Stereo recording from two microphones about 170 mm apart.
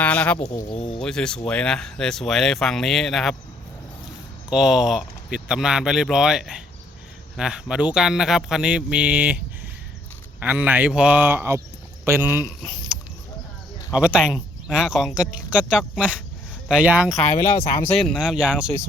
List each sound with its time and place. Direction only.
0.0 s speech: 10° left (ahead or behind)
0.4 s speech: 20° left (ahead or behind)
0.8 s speech: 35° left (ahead or behind)
1.0 s speech: 5° left (ahead or behind)
4.4 s speech: 5° right (ahead or behind)
10.4 s a man's voice: 10° right (ahead or behind)
13.9 s speech: 5° right (ahead or behind)